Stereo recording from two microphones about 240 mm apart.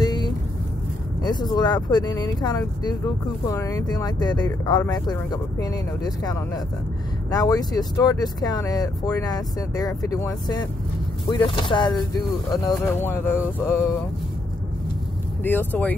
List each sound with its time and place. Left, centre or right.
0.0 s vehicle: centre
1.2 s speech: centre
12.7 s speech: centre
15.4 s speech: centre